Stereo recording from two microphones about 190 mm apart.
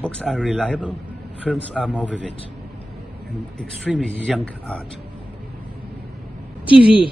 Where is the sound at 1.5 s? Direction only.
Centre (ahead or behind).